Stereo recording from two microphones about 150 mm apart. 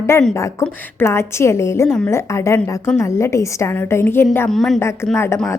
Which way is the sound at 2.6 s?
5° left (ahead or behind).